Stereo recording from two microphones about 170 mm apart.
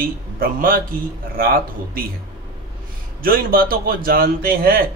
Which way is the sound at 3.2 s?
60° right (ahead or behind).